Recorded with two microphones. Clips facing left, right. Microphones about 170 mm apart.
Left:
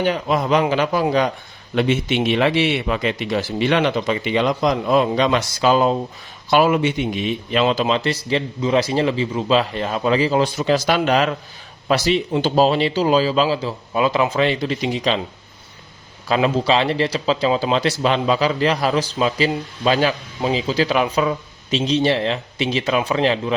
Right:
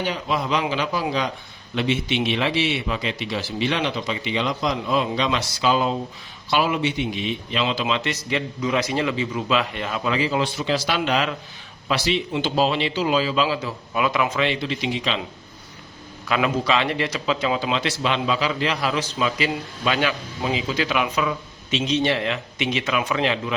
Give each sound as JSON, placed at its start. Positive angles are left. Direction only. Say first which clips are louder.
{"t": 0.0, "sound": "a man's voice", "louder": "left 5 dB", "side_deg": 50}
{"t": 16.2, "sound": "a man's voice", "louder": "left 4 dB", "side_deg": 30}